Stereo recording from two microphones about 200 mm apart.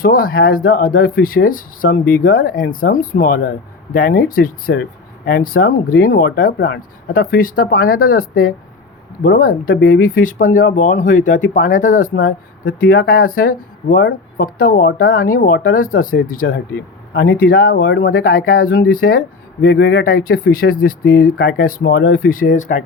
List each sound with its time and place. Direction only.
0.0 s speech: 45° left (ahead or behind)
4.7 s speech: 55° left (ahead or behind)
16.5 s speech: 60° left (ahead or behind); by 22.8 s 40° left (ahead or behind)